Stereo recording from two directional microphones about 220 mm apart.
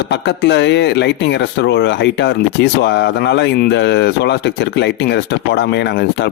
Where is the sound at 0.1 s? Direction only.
50° left (ahead or behind).